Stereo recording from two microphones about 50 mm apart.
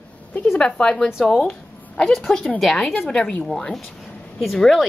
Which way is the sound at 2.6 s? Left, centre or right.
Centre.